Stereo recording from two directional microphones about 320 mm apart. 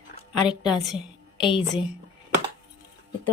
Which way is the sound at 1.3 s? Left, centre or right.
Centre.